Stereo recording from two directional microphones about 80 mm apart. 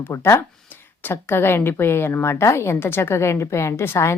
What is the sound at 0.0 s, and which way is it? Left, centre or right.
A woman's voice, left.